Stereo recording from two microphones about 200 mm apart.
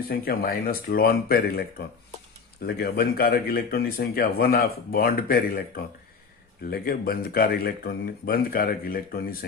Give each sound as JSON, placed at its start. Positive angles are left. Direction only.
{"t": 0.1, "sound": "speech", "side_deg": 50}
{"t": 2.6, "sound": "speech", "side_deg": 50}